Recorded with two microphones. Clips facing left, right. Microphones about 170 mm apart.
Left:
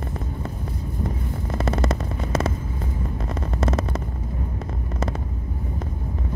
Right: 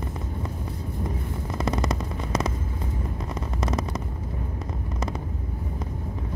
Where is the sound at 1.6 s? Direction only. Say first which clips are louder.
Left 2 dB; 25° left (ahead or behind).